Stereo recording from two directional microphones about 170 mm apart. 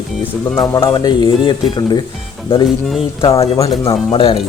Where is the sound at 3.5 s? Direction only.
20° left (ahead or behind).